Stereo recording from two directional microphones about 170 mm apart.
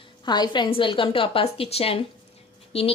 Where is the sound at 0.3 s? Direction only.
25° left (ahead or behind).